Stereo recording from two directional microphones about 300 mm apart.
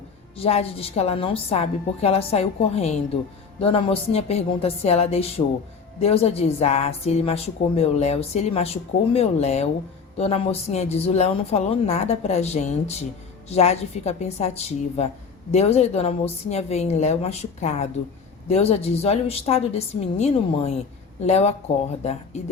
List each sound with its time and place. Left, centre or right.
0.3 s speech: centre